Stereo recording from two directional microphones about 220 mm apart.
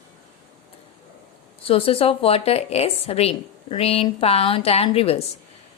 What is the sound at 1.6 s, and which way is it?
A woman's voice, 25° left (ahead or behind).